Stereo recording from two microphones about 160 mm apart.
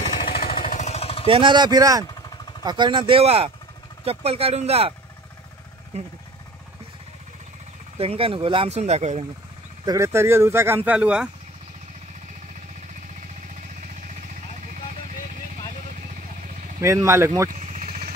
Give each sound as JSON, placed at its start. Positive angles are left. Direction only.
{"t": 0.0, "sound": "vehicle", "side_deg": 35}
{"t": 0.7, "sound": "vehicle", "side_deg": 45}
{"t": 1.2, "sound": "speech", "side_deg": -30}
{"t": 5.9, "sound": "speech", "side_deg": -40}
{"t": 8.0, "sound": "speech", "side_deg": -35}
{"t": 9.8, "sound": "speech", "side_deg": -20}
{"t": 16.8, "sound": "speech", "side_deg": -20}
{"t": 17.5, "sound": "vehicle", "side_deg": -50}